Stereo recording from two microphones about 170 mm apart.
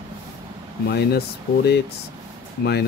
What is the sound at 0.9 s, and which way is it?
Speech, 75° left (ahead or behind).